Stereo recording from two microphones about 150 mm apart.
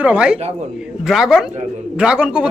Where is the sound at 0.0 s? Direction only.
5° right (ahead or behind).